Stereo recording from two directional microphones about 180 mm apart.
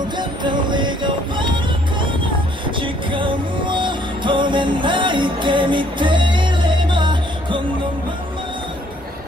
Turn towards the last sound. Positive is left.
turn(degrees=-25)  # may be behind; listen again after turning